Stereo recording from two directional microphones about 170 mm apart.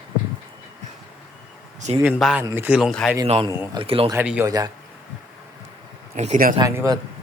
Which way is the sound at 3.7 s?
30° right (ahead or behind).